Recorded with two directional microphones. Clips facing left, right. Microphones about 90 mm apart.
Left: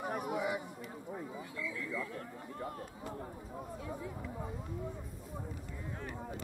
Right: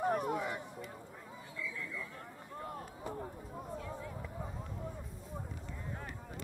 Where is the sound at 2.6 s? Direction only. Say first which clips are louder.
Even; 5° right (ahead or behind).